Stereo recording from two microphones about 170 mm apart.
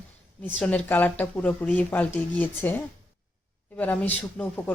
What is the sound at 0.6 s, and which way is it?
A woman's voice, 10° left (ahead or behind).